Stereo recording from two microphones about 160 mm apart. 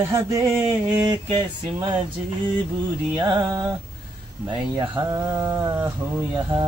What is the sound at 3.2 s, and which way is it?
Speech, 25° right (ahead or behind).